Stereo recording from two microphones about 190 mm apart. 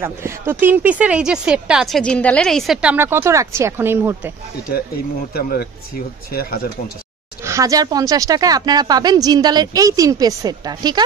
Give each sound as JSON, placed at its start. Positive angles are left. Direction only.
{"t": 0.0, "sound": "speech", "side_deg": -15}
{"t": 5.3, "sound": "speech", "side_deg": 55}
{"t": 7.4, "sound": "a woman's voice", "side_deg": -15}